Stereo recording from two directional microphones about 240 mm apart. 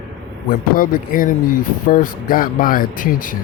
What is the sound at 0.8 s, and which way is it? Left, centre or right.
Speech, left.